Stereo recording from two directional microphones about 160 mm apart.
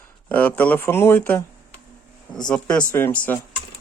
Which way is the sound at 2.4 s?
5° left (ahead or behind).